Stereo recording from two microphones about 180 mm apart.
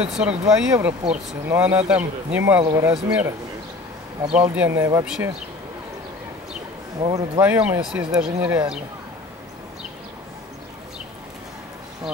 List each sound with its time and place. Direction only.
0.0 s a man's voice: 5° right (ahead or behind)
2.6 s speech: 20° right (ahead or behind)
4.3 s a man's voice: 10° right (ahead or behind)
5.0 s speech: 5° right (ahead or behind)
7.0 s speech: 20° right (ahead or behind)
7.4 s speech: 5° right (ahead or behind)
8.4 s a man's voice: 15° right (ahead or behind)